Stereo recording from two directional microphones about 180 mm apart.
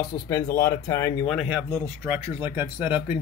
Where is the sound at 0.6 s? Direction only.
15° left (ahead or behind).